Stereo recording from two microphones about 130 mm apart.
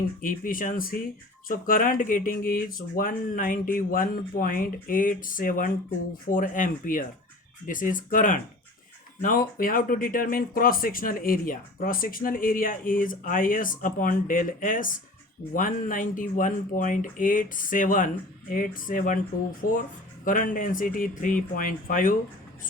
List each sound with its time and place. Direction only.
0.2 s speech: 90° left